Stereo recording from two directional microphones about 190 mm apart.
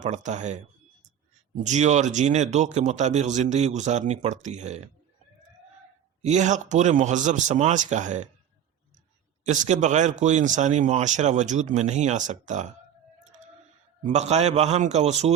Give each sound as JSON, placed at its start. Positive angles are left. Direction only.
{"t": 0.0, "sound": "speech", "side_deg": -40}
{"t": 1.6, "sound": "speech", "side_deg": -40}
{"t": 6.2, "sound": "speech", "side_deg": -40}
{"t": 9.4, "sound": "speech", "side_deg": -40}
{"t": 14.0, "sound": "speech", "side_deg": -35}